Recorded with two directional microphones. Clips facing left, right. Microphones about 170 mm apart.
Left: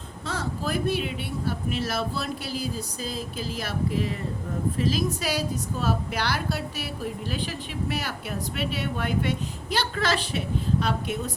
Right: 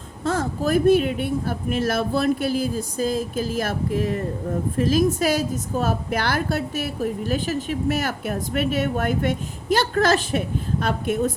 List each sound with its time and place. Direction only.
0.3 s a woman's voice: 50° right (ahead or behind)